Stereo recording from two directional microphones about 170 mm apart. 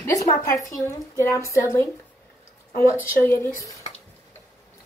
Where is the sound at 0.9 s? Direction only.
20° left (ahead or behind).